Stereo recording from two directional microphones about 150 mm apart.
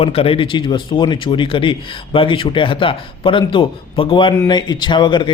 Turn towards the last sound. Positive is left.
turn(degrees=30)  # may be behind; listen again after turning